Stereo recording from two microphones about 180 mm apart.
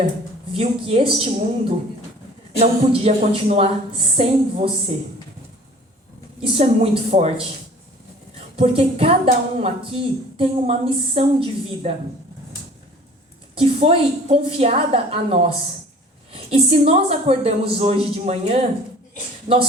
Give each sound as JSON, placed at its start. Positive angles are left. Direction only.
{"t": 0.5, "sound": "a woman's voice", "side_deg": -30}
{"t": 2.6, "sound": "a woman's voice", "side_deg": -30}
{"t": 6.4, "sound": "a woman's voice", "side_deg": -35}
{"t": 8.5, "sound": "a woman's voice", "side_deg": -30}
{"t": 13.6, "sound": "a woman's voice", "side_deg": -30}